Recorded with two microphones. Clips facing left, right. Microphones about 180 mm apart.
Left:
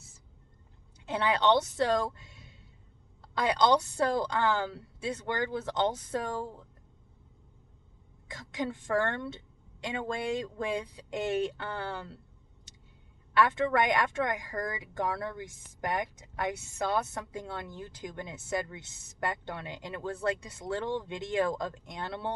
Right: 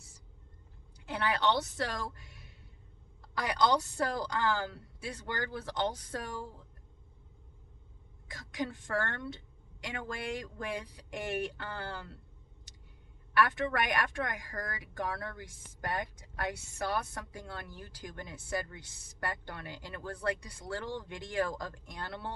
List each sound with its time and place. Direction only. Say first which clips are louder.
1.0 s a woman's voice: left 4 dB; 20° left (ahead or behind)
8.3 s a woman's voice: left 3 dB; 25° left (ahead or behind)
13.3 s a woman's voice: left 3 dB; 20° left (ahead or behind)